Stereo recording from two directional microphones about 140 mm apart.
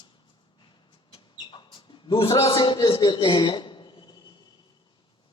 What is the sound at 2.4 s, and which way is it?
A man's voice, 35° left (ahead or behind).